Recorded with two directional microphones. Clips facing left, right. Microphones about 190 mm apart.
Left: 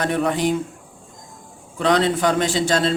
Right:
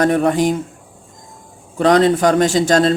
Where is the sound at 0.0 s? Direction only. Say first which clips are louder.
Right 6 dB; 45° right (ahead or behind).